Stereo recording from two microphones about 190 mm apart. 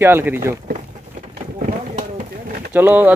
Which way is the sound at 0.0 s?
10° right (ahead or behind).